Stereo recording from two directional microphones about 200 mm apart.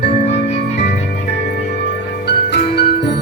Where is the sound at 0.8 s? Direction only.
55° left (ahead or behind).